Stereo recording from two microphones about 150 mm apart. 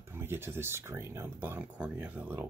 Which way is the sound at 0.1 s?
15° right (ahead or behind).